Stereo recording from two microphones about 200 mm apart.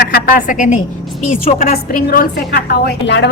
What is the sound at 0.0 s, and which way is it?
A woman's voice, 50° left (ahead or behind).